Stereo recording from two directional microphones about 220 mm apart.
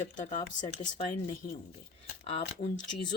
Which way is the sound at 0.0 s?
35° left (ahead or behind).